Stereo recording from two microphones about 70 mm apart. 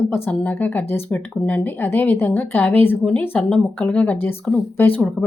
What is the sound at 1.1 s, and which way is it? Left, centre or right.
Speech, centre.